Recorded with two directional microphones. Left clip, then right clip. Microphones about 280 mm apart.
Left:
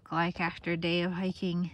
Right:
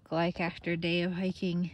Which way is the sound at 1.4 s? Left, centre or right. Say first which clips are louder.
Even; left.